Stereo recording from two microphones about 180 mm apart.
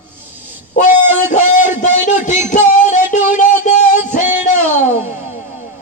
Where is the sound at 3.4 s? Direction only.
40° left (ahead or behind).